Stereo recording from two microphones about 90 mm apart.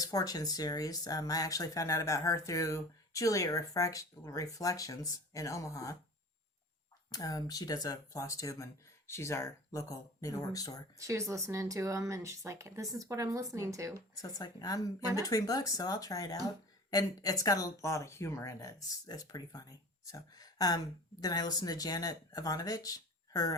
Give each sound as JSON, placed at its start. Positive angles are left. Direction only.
{"t": 0.0, "sound": "speech", "side_deg": 40}
{"t": 7.1, "sound": "speech", "side_deg": 45}
{"t": 10.9, "sound": "speech", "side_deg": -35}
{"t": 14.2, "sound": "speech", "side_deg": 45}